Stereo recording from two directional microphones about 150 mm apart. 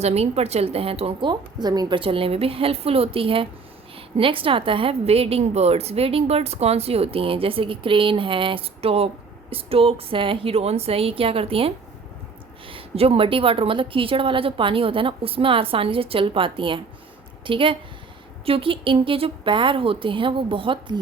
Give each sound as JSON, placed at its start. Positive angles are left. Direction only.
{"t": 0.0, "sound": "a woman's voice", "side_deg": -45}